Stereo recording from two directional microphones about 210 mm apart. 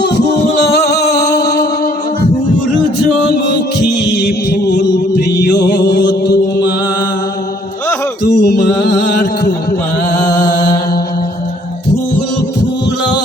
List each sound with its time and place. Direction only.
0.0 s music: 50° left (ahead or behind)
3.5 s music: 55° left (ahead or behind)
8.3 s mantra: 55° left (ahead or behind)